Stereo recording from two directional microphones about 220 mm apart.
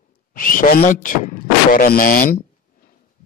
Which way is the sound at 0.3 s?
40° left (ahead or behind).